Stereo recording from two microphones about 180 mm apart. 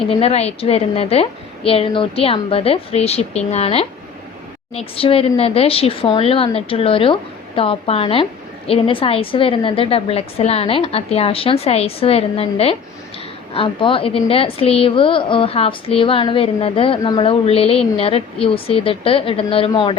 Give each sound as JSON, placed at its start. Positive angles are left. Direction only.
{"t": 0.0, "sound": "a woman's voice", "side_deg": 35}